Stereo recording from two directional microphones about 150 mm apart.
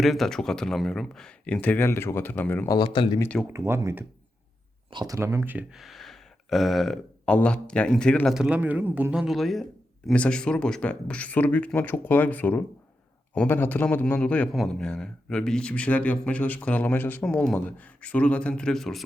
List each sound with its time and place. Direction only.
0.0 s speech: centre (ahead or behind)
2.6 s speech: 30° left (ahead or behind)
3.4 s a man's voice: 15° right (ahead or behind); by 8.4 s 5° left (ahead or behind)
8.4 s a man's voice: 10° right (ahead or behind)